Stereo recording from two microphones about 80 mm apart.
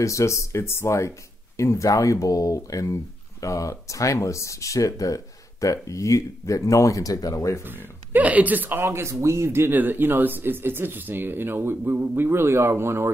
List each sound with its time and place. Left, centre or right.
0.0 s speech: left
7.6 s a man's voice: right
8.8 s a man's voice: right